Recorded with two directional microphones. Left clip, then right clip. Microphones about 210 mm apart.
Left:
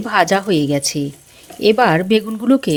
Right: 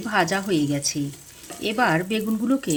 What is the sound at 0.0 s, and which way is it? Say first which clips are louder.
Speech: left 8 dB; 45° left (ahead or behind).